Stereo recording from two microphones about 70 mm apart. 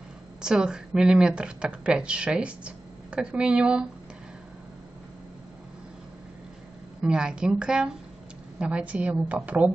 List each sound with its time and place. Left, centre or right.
0.4 s speech: centre
7.0 s a woman's voice: centre